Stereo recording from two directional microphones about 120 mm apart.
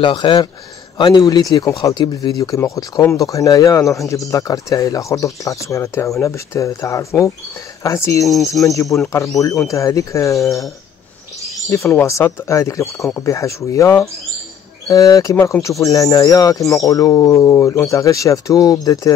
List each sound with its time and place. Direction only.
0.0 s speech: 40° left (ahead or behind); by 8.3 s 25° left (ahead or behind)
8.3 s speech: centre (ahead or behind)
8.6 s speech: 25° left (ahead or behind)
11.7 s speech: 25° left (ahead or behind)